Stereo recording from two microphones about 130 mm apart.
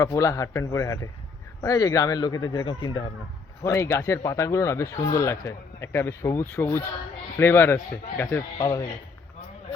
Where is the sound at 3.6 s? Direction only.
20° left (ahead or behind).